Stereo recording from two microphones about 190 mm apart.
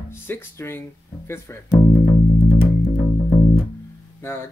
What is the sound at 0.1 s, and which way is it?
Speech, 10° left (ahead or behind).